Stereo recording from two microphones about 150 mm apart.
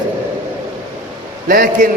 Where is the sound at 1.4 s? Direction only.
65° right (ahead or behind).